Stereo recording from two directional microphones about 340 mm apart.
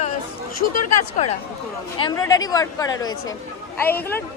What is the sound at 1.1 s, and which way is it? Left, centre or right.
Speech, centre.